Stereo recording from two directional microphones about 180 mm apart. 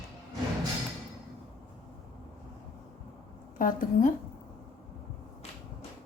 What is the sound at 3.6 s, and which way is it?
Speech, 50° left (ahead or behind).